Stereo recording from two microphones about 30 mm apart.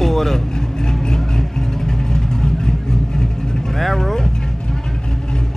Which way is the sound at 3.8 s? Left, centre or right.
Centre.